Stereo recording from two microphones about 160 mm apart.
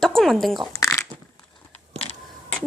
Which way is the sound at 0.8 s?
15° left (ahead or behind).